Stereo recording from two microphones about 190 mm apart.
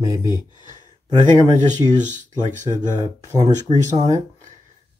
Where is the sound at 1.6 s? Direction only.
40° right (ahead or behind).